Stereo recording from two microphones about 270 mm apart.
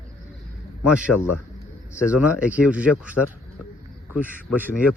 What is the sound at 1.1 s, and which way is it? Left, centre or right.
Speech, left.